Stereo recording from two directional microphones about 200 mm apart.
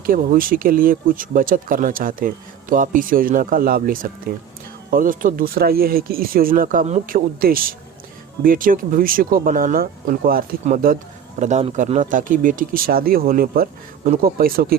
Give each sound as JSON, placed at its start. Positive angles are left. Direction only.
{"t": 0.0, "sound": "speech", "side_deg": -45}